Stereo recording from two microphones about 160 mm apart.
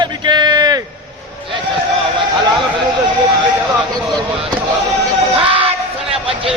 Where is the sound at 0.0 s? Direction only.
25° right (ahead or behind).